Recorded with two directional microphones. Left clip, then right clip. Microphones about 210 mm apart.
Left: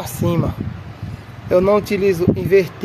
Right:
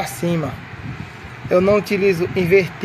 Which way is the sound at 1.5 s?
Centre (ahead or behind).